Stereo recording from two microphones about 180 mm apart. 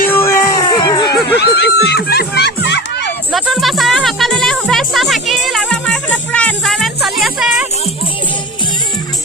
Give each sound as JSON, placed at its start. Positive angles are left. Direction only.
{"t": 0.1, "sound": "a sound", "side_deg": 15}
{"t": 1.4, "sound": "speech", "side_deg": 70}
{"t": 3.3, "sound": "music", "side_deg": 0}